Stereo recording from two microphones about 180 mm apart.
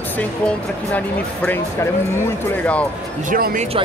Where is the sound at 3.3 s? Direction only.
50° right (ahead or behind).